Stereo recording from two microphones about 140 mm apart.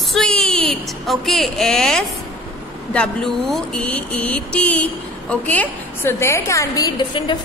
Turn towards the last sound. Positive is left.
turn(degrees=35)  # may be behind; listen again after turning